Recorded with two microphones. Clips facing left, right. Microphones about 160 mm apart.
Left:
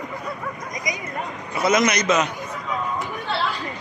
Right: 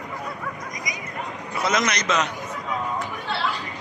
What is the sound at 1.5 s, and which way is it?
Speech, 5° left (ahead or behind).